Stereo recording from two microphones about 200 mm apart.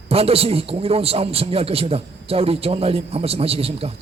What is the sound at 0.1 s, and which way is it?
A man's voice, 30° right (ahead or behind).